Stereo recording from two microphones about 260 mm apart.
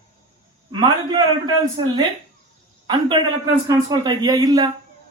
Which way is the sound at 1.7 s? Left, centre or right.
Centre.